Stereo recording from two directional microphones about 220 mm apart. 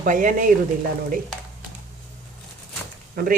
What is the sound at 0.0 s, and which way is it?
Speech, 35° right (ahead or behind).